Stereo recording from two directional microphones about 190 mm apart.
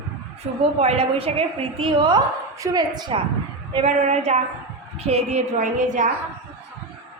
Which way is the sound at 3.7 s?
35° right (ahead or behind).